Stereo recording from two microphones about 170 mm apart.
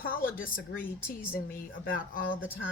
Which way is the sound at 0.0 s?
55° left (ahead or behind).